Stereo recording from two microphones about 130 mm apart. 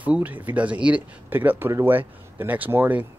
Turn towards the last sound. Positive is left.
turn(degrees=-15)  # may be behind; listen again after turning